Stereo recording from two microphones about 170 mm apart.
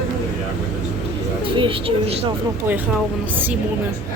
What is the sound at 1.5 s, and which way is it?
Speech, 30° right (ahead or behind).